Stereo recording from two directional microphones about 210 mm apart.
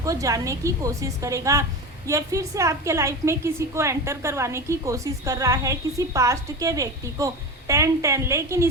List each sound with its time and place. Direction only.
0.0 s a woman's voice: 15° right (ahead or behind)